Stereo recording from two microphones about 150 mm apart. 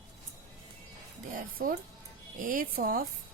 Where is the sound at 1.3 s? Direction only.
70° right (ahead or behind).